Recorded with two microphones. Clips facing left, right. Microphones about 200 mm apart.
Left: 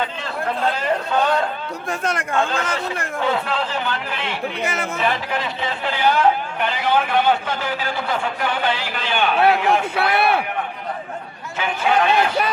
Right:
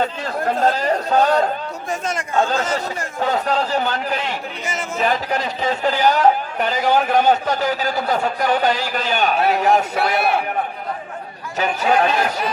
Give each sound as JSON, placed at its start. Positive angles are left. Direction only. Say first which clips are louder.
{"t": 0.0, "sound": "a sound", "louder": "right 4 dB", "side_deg": -45}
{"t": 1.9, "sound": "speech", "louder": "left 1 dB", "side_deg": 60}
{"t": 2.4, "sound": "a man's voice", "louder": "right 6 dB", "side_deg": -40}
{"t": 4.6, "sound": "speech", "louder": "left 2 dB", "side_deg": 55}
{"t": 4.9, "sound": "a man's voice", "louder": "right 5 dB", "side_deg": -40}
{"t": 10.0, "sound": "speech", "louder": "even", "side_deg": 60}
{"t": 11.6, "sound": "a man's voice", "louder": "right 2 dB", "side_deg": -40}